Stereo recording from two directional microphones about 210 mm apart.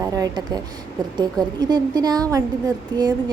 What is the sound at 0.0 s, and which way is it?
A woman's voice, 20° right (ahead or behind).